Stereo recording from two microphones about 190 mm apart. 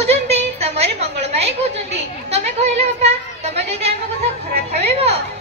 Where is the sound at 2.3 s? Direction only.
35° right (ahead or behind).